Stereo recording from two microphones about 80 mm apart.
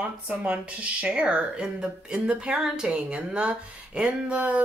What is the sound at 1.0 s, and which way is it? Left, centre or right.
Speech, centre.